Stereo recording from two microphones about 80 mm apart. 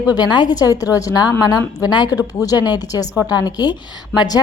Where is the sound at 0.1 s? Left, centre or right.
Left.